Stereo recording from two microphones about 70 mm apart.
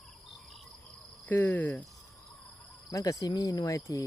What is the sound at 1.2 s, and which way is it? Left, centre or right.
Speech, left.